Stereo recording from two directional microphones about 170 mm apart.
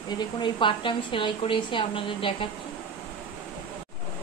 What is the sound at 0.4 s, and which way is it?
A woman's voice, 30° left (ahead or behind).